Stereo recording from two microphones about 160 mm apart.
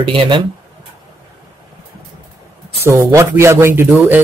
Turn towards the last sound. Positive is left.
turn(degrees=-15)  # may be behind; listen again after turning